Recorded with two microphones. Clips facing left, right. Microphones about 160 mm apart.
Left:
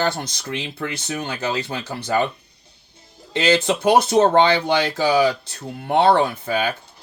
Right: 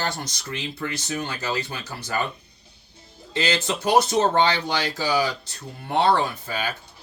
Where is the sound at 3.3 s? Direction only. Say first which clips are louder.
Left 7 dB; 65° left (ahead or behind).